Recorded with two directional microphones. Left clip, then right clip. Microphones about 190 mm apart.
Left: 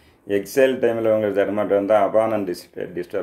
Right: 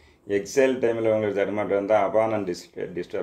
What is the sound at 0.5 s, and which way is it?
Speech, 10° left (ahead or behind).